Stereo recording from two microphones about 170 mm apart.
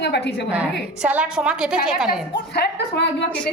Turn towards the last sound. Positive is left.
turn(degrees=75)  # may be behind; listen again after turning